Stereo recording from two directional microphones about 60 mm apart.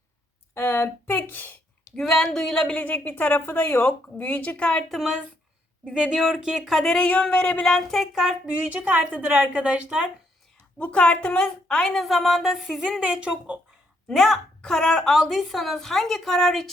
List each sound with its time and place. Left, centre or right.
0.5 s a sound: left
2.0 s speech: centre
2.8 s a woman's voice: left
4.9 s a woman's voice: centre
6.8 s speech: centre
8.4 s a woman's voice: centre
8.7 s a woman's voice: right
10.8 s speech: left
12.0 s a woman's voice: centre
14.1 s a woman's voice: centre